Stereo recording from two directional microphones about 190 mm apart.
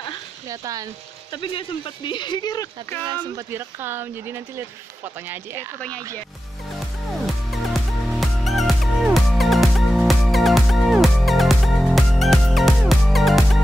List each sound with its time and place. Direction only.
0.5 s speech: 20° right (ahead or behind)
1.3 s speech: 25° left (ahead or behind)
3.3 s speech: 10° right (ahead or behind)
7.2 s music: centre (ahead or behind)